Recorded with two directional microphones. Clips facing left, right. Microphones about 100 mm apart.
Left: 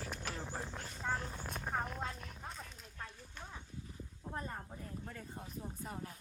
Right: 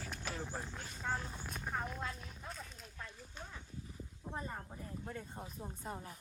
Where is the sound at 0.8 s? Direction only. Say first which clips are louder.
Left 1 dB; centre (ahead or behind).